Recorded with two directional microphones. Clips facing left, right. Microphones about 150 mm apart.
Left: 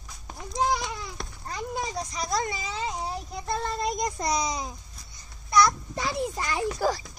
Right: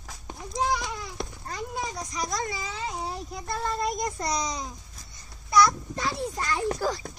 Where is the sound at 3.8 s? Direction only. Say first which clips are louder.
Left 1 dB; 15° left (ahead or behind).